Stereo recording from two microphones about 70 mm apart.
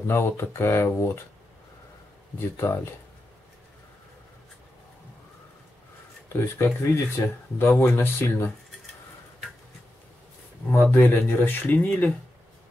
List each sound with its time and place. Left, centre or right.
0.0 s speech: left
2.3 s speech: left
6.2 s speech: left
10.7 s speech: left